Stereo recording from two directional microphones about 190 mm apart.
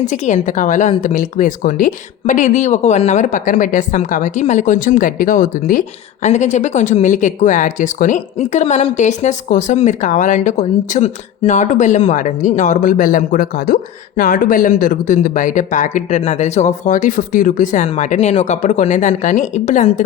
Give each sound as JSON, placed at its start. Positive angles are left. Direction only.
{"t": 0.0, "sound": "speech", "side_deg": 40}